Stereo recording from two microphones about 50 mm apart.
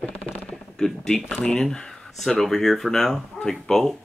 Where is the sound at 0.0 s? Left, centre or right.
Left.